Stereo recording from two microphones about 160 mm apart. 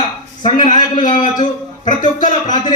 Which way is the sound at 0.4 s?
35° left (ahead or behind).